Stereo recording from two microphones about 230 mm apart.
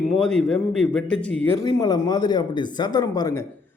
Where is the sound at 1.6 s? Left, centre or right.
Centre.